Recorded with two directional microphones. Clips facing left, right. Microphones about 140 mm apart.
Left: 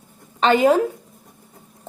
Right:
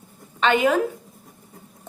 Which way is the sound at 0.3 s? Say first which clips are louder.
Left 4 dB; 35° left (ahead or behind).